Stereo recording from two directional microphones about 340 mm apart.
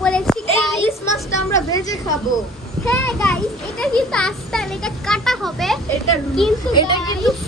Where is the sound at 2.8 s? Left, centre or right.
Centre.